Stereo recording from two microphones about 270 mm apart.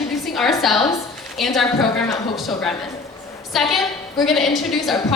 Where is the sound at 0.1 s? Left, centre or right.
Centre.